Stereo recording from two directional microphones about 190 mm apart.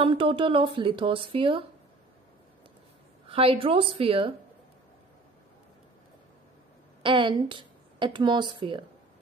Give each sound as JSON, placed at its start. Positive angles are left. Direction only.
{"t": 0.0, "sound": "speech", "side_deg": -30}
{"t": 3.3, "sound": "speech", "side_deg": -30}
{"t": 7.0, "sound": "speech", "side_deg": -25}